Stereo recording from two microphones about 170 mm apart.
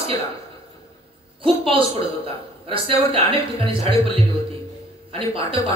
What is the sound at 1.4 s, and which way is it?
A man's voice, 35° right (ahead or behind).